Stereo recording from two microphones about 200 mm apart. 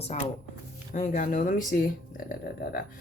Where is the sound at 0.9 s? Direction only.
45° left (ahead or behind).